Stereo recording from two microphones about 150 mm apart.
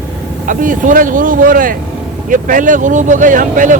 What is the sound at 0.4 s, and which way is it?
Speech, 60° right (ahead or behind).